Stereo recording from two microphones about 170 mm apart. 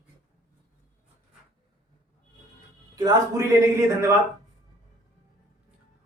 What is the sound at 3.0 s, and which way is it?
A man's voice, 20° right (ahead or behind).